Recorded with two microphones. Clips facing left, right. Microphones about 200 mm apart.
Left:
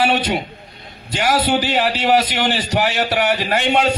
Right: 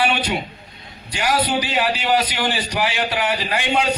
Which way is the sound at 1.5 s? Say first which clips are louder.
Left 3 dB; 45° left (ahead or behind).